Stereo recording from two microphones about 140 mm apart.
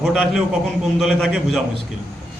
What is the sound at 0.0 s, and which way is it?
A man's voice, centre (ahead or behind).